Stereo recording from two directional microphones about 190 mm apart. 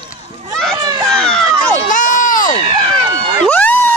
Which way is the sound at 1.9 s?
40° left (ahead or behind).